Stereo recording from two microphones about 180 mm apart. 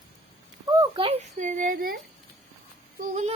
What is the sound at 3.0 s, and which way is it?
Yodeling, 40° right (ahead or behind).